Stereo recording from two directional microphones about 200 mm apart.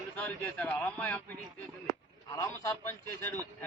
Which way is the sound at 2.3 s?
15° left (ahead or behind).